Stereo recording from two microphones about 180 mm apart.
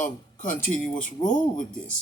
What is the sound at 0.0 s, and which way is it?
Speech, 45° left (ahead or behind).